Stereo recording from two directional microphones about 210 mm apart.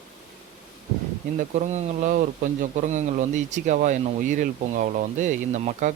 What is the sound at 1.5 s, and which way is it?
Speech, 35° right (ahead or behind).